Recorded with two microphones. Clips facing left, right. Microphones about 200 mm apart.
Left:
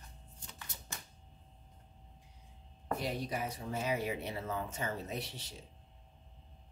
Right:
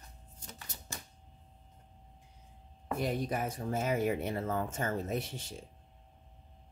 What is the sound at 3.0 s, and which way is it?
Speech, 50° right (ahead or behind).